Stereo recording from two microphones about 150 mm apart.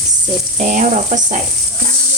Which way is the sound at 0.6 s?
60° right (ahead or behind).